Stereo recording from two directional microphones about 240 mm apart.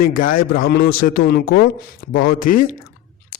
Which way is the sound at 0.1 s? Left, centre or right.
Left.